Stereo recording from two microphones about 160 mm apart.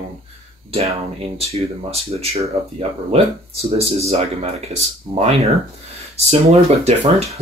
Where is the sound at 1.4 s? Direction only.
40° right (ahead or behind).